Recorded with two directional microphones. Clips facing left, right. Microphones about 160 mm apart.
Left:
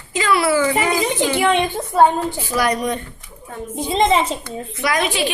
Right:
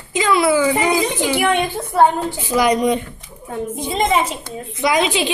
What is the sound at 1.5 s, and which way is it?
Speech, 20° left (ahead or behind).